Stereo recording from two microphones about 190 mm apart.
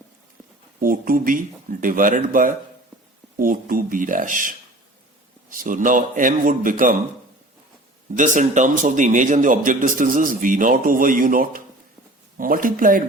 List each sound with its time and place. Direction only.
0.8 s a man's voice: 45° right (ahead or behind)
5.5 s a man's voice: 45° right (ahead or behind)
8.1 s a man's voice: 40° right (ahead or behind)